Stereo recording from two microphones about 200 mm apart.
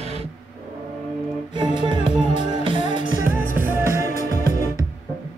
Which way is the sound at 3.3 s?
10° right (ahead or behind).